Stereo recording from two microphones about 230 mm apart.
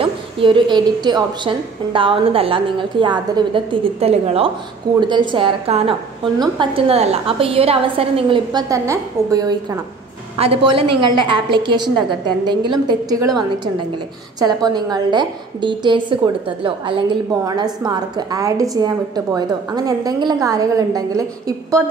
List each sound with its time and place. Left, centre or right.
0.0 s a woman's voice: right
10.7 s a woman's voice: right
11.0 s a woman's voice: right
14.4 s a woman's voice: centre